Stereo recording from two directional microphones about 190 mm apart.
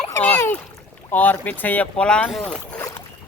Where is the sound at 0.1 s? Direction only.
10° left (ahead or behind).